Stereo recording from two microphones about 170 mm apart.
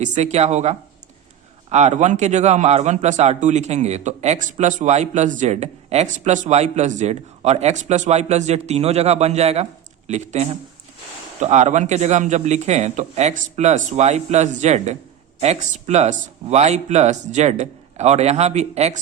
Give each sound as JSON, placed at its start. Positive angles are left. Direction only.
{"t": 0.0, "sound": "a man's voice", "side_deg": -45}